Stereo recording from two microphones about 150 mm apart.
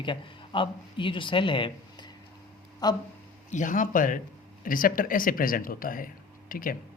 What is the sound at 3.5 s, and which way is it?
A man's voice, 60° left (ahead or behind).